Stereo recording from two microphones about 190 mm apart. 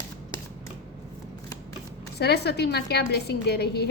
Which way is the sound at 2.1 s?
60° left (ahead or behind).